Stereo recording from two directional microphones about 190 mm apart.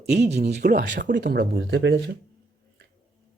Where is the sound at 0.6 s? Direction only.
60° right (ahead or behind).